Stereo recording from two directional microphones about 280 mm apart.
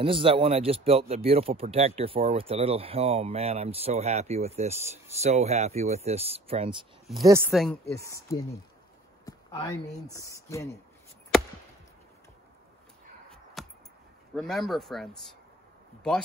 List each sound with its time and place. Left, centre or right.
0.0 s speech: centre
7.2 s speech: centre
8.0 s speech: centre
9.2 s a sound: centre
10.1 s speech: centre
13.6 s a sound: centre
14.3 s speech: centre